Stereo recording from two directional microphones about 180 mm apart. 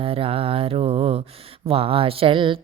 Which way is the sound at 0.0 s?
30° right (ahead or behind).